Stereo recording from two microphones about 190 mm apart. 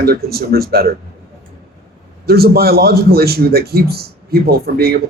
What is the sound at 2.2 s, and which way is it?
A man's voice, 55° right (ahead or behind).